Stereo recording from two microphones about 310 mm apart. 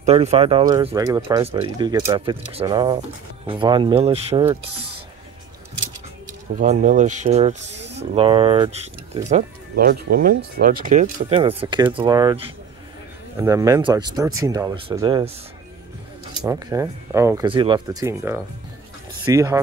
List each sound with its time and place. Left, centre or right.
0.0 s speech: centre
6.6 s speech: right
16.4 s speech: centre